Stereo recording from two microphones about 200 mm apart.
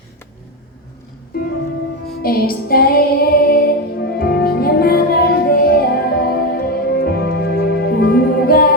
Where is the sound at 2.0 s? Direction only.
50° left (ahead or behind).